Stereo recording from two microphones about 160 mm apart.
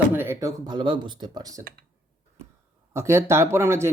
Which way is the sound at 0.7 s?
30° right (ahead or behind).